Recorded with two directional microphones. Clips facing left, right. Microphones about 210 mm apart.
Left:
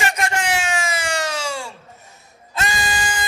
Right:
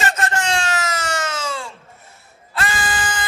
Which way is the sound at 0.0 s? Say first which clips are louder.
Even; 15° left (ahead or behind).